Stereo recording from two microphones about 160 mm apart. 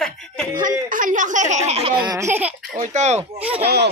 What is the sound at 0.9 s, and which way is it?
A woman's voice, 55° right (ahead or behind).